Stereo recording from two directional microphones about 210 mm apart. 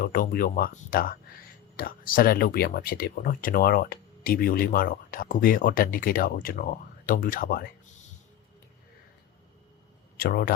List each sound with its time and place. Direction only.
0.0 s speech: 40° left (ahead or behind)
10.2 s speech: 45° left (ahead or behind)